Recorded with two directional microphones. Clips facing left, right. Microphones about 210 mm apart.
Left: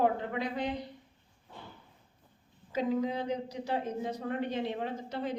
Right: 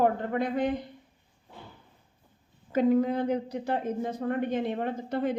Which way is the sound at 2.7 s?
55° right (ahead or behind).